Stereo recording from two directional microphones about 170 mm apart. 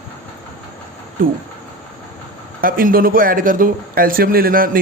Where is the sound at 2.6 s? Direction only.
55° right (ahead or behind).